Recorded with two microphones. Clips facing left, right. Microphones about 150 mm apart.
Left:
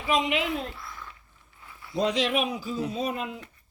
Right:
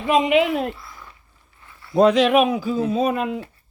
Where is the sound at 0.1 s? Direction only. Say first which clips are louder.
Right 9 dB; 65° right (ahead or behind).